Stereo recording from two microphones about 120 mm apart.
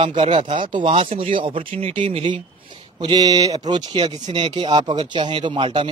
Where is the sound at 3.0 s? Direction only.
40° right (ahead or behind).